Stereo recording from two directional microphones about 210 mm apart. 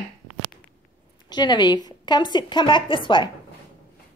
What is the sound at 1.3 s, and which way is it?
A woman's voice, 20° left (ahead or behind).